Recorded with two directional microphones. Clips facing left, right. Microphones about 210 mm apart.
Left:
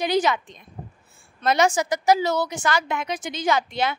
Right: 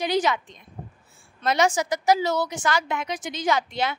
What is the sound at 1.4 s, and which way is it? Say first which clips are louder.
A woman's voice: left 2 dB; 50° left (ahead or behind).